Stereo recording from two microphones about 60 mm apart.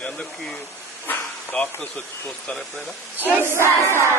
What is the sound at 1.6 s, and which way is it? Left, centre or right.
Speech, centre.